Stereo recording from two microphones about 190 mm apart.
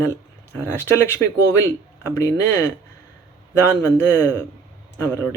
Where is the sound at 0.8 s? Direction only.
15° left (ahead or behind).